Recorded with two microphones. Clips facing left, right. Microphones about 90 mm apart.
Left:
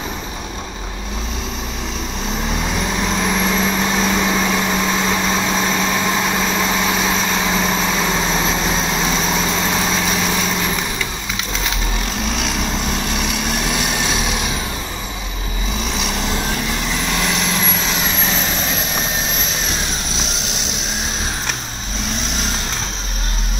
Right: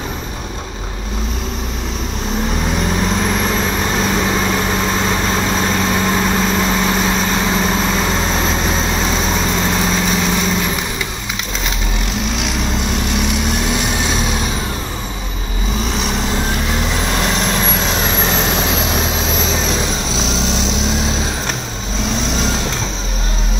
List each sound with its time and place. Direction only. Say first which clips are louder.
3.2 s vehicle: right 1 dB; 5° right (ahead or behind)
13.3 s vehicle: right 3 dB; 25° right (ahead or behind)
17.1 s vehicle: right 2 dB; 40° right (ahead or behind)